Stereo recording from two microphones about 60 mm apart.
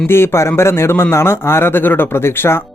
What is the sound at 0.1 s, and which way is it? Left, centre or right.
Speech, left.